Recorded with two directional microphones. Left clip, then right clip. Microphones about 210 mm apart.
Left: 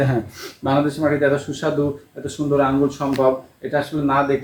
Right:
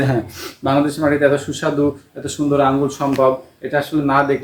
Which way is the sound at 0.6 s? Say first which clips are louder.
Right 2 dB; 40° right (ahead or behind).